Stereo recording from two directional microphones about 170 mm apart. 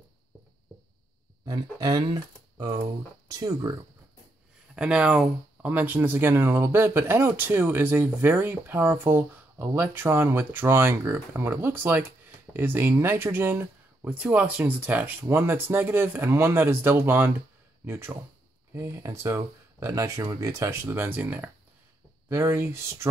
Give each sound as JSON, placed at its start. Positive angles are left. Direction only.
{"t": 1.8, "sound": "speech", "side_deg": -20}
{"t": 4.7, "sound": "speech", "side_deg": -5}